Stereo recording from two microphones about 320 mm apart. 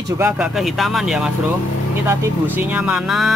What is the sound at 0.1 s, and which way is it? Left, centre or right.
Speech, centre.